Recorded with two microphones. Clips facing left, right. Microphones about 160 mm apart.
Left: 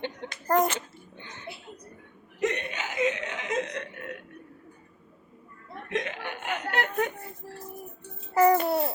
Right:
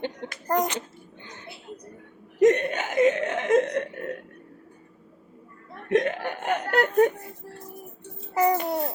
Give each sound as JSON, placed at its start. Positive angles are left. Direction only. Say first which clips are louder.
{"t": 0.4, "sound": "a child's voice", "louder": "left 1 dB", "side_deg": -15}
{"t": 2.4, "sound": "laughter", "louder": "right 10 dB", "side_deg": -45}
{"t": 5.9, "sound": "laughter", "louder": "right 9 dB", "side_deg": -45}
{"t": 8.4, "sound": "babbling", "louder": "left 2 dB", "side_deg": -15}